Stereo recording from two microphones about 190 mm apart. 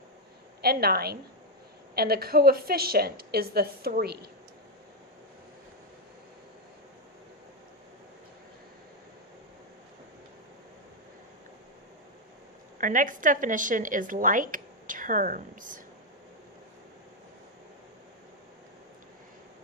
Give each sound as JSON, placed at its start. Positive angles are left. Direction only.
{"t": 0.6, "sound": "a woman's voice", "side_deg": -55}
{"t": 12.8, "sound": "a woman's voice", "side_deg": -45}